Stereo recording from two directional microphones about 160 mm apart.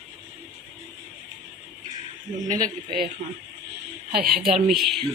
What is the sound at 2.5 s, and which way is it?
Speech, 65° right (ahead or behind).